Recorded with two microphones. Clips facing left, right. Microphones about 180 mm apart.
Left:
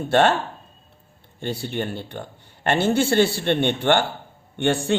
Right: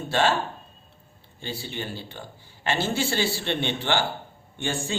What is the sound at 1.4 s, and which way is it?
A man's voice, 55° left (ahead or behind).